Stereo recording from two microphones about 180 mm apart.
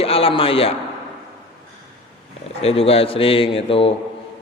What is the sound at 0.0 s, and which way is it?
Speech, 30° left (ahead or behind).